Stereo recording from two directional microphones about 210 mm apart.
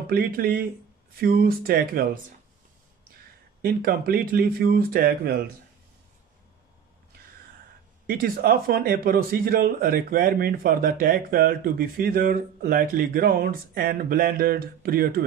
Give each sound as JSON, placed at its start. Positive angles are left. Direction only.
{"t": 0.1, "sound": "speech", "side_deg": -45}
{"t": 3.6, "sound": "speech", "side_deg": -45}
{"t": 8.1, "sound": "speech", "side_deg": -45}